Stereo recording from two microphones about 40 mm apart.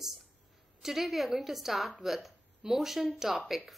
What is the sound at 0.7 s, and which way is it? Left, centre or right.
Speech, centre.